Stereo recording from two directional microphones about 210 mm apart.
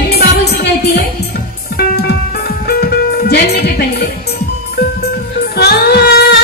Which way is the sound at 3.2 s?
50° left (ahead or behind).